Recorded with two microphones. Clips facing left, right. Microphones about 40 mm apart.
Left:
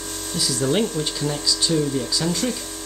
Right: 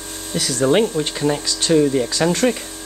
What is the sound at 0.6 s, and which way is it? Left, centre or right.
Speech, right.